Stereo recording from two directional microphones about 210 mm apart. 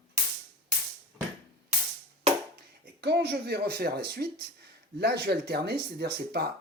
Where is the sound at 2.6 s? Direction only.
50° right (ahead or behind).